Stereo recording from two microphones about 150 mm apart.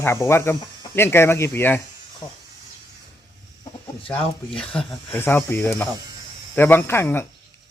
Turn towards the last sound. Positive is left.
turn(degrees=15)  # may be behind; listen again after turning